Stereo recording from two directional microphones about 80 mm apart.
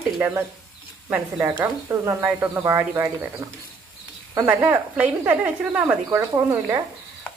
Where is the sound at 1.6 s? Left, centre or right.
Right.